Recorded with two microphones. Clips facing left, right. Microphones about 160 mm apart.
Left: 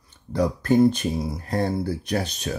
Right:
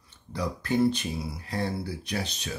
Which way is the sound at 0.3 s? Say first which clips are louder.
Left 8 dB; 45° left (ahead or behind).